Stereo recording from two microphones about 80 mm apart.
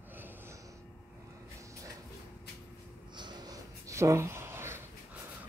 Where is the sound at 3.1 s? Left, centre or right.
Right.